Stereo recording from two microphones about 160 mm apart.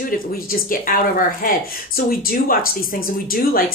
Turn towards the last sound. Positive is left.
turn(degrees=65)  # may be behind; listen again after turning